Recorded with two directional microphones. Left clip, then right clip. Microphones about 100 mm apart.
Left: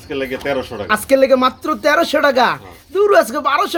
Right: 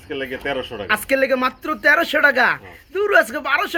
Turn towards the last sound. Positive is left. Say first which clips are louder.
# left 4 dB
turn(degrees=10)  # may be behind; listen again after turning